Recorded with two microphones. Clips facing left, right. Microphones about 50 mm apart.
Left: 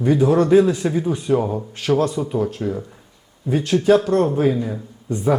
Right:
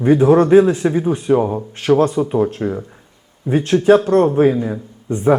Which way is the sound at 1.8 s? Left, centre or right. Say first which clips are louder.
Right 5 dB; right.